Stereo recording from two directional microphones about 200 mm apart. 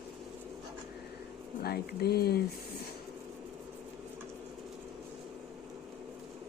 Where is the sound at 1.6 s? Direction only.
50° left (ahead or behind).